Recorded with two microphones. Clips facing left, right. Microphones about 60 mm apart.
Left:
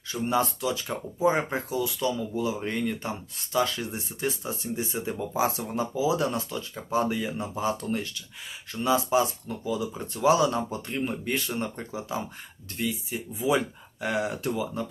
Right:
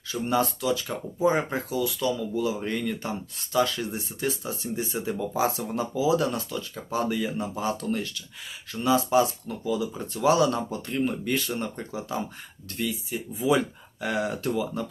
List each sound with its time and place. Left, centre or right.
0.1 s speech: centre
3.9 s speech: centre
5.8 s speech: left
8.8 s speech: centre